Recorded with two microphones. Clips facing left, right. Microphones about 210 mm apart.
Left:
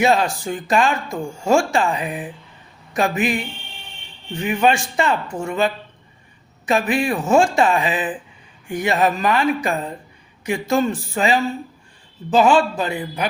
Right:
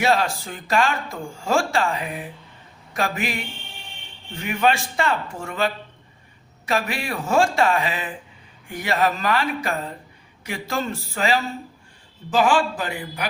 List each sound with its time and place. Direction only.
0.0 s speech: 20° left (ahead or behind)
4.4 s speech: 15° left (ahead or behind)